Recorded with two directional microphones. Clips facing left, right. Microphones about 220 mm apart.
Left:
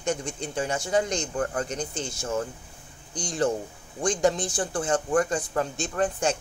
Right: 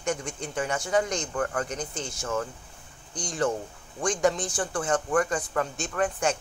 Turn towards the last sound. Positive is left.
turn(degrees=25)  # may be behind; listen again after turning